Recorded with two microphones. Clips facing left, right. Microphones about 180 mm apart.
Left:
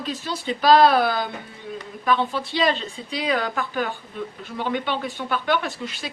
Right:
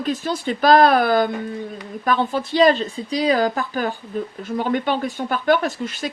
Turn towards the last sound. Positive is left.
turn(degrees=-45)  # may be behind; listen again after turning